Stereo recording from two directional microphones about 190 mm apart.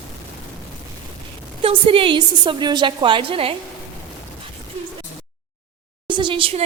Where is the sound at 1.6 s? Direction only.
30° right (ahead or behind).